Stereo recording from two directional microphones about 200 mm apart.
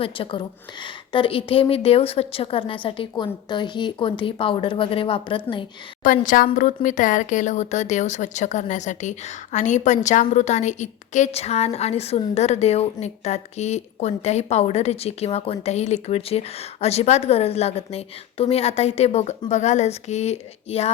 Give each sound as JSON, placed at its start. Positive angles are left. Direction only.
{"t": 0.0, "sound": "a woman's voice", "side_deg": 25}
{"t": 6.0, "sound": "speech", "side_deg": 40}